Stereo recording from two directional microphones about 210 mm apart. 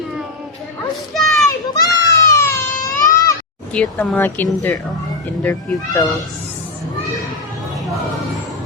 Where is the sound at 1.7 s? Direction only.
15° left (ahead or behind).